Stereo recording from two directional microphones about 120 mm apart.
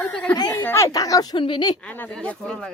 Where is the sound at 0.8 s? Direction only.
30° left (ahead or behind).